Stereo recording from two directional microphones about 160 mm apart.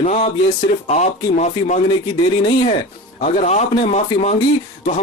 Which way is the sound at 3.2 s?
45° left (ahead or behind).